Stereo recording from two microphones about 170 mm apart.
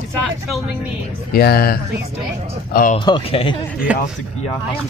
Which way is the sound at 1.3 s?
65° left (ahead or behind).